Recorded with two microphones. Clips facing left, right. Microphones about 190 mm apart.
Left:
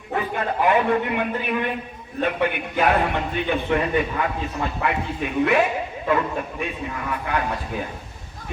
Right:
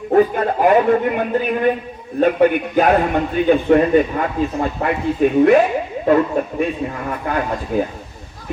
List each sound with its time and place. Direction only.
0.1 s a man's voice: 40° right (ahead or behind)